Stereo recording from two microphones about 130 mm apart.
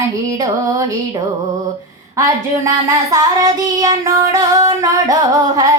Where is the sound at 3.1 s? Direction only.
25° right (ahead or behind).